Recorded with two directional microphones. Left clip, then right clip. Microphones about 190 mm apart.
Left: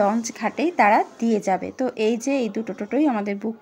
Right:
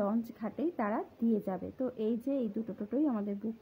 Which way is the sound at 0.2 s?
10° left (ahead or behind).